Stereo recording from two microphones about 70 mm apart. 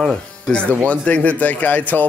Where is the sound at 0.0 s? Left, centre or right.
Centre.